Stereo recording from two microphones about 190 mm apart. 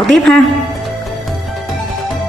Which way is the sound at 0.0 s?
Centre (ahead or behind).